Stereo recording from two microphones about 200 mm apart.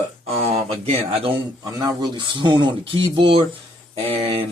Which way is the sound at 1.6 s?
20° right (ahead or behind).